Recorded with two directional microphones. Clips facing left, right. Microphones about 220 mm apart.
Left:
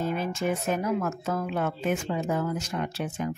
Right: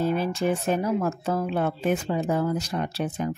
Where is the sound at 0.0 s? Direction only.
35° right (ahead or behind).